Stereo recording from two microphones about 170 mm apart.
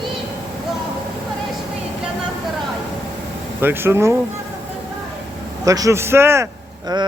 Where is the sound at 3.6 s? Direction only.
15° right (ahead or behind).